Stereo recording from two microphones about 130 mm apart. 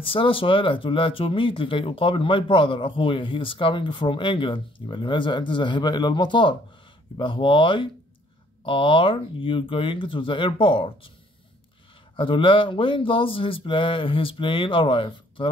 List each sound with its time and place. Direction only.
0.0 s speech: 45° left (ahead or behind)
12.2 s speech: 40° left (ahead or behind)